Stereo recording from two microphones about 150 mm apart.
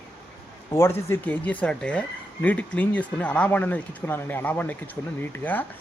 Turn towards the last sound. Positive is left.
turn(degrees=10)  # may be behind; listen again after turning